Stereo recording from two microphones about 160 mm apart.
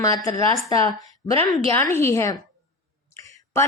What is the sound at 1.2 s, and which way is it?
A woman's voice, 20° left (ahead or behind).